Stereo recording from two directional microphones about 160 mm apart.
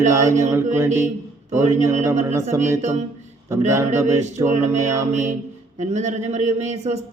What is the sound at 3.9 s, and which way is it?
Speech, 15° right (ahead or behind).